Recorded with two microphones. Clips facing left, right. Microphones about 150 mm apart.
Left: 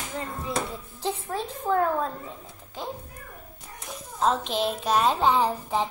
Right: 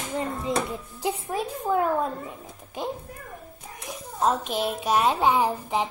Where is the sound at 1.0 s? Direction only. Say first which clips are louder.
Right 2 dB; 10° right (ahead or behind).